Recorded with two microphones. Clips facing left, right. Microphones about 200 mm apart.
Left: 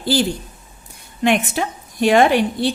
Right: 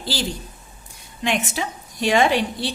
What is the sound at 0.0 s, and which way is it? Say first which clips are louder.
A woman's voice: left 8 dB; 55° left (ahead or behind).